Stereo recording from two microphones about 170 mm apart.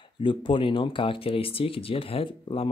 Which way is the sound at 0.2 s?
30° left (ahead or behind).